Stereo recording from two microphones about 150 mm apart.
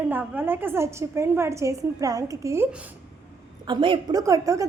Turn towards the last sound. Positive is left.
turn(degrees=-20)  # may be behind; listen again after turning